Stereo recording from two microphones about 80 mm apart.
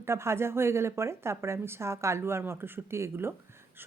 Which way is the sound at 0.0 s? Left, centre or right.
Right.